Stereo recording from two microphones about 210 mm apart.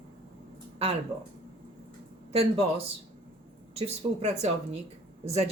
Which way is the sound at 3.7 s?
30° right (ahead or behind).